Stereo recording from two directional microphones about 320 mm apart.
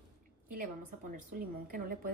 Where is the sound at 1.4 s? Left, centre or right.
Right.